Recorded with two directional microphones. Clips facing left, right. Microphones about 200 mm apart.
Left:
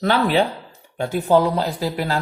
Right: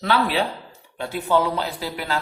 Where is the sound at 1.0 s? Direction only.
45° left (ahead or behind).